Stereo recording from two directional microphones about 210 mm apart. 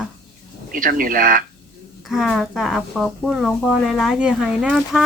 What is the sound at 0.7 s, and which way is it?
Speech, 40° right (ahead or behind).